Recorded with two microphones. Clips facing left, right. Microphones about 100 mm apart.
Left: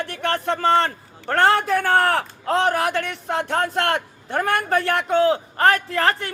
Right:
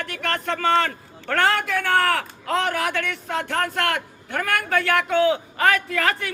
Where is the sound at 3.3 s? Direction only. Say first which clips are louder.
Left 2 dB; 25° left (ahead or behind).